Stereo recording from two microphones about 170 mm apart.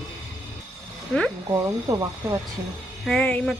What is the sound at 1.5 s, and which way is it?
Speech, 20° right (ahead or behind).